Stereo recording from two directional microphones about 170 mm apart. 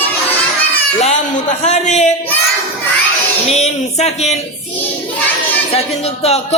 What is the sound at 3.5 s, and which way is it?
Music, 40° left (ahead or behind).